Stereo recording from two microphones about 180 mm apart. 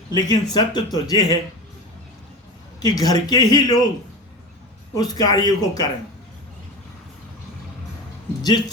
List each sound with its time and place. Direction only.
0.1 s speech: 20° left (ahead or behind)
2.8 s speech: 20° left (ahead or behind)
4.9 s speech: 20° left (ahead or behind)
8.4 s speech: 20° left (ahead or behind)